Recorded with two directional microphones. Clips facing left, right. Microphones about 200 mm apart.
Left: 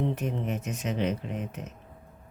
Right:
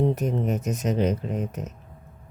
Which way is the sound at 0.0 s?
40° right (ahead or behind).